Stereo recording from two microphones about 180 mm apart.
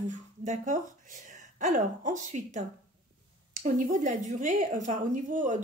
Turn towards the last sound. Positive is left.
turn(degrees=-45)  # may be behind; listen again after turning